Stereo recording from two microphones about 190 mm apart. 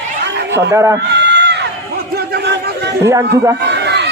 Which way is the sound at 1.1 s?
65° right (ahead or behind).